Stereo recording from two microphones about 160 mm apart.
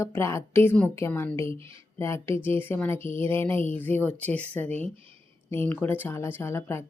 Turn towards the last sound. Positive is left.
turn(degrees=15)  # may be behind; listen again after turning